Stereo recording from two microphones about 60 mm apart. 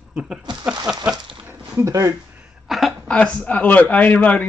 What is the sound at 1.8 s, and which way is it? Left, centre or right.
Speech, right.